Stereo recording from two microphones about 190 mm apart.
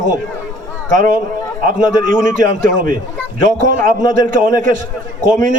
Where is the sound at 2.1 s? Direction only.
45° right (ahead or behind).